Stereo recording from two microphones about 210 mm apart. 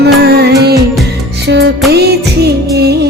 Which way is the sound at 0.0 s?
50° right (ahead or behind).